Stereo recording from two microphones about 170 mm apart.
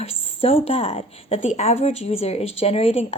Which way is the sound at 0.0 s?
35° left (ahead or behind).